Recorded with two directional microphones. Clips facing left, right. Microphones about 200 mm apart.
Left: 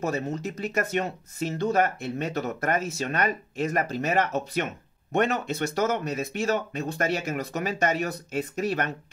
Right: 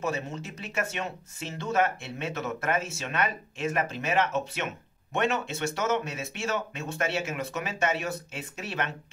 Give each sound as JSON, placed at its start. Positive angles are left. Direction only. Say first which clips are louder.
{"t": 0.0, "sound": "speech", "louder": "left 4 dB", "side_deg": 40}